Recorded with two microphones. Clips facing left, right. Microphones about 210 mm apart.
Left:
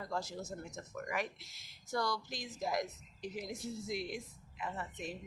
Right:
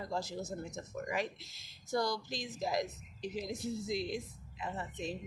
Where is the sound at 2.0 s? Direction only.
40° right (ahead or behind).